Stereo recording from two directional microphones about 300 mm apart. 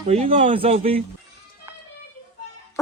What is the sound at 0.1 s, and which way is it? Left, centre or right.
Speech, right.